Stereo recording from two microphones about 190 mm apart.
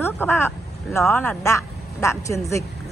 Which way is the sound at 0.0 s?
10° left (ahead or behind).